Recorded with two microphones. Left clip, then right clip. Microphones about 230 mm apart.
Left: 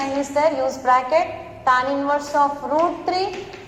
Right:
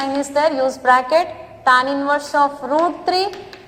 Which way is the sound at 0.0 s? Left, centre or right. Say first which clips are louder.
Right 2 dB; right.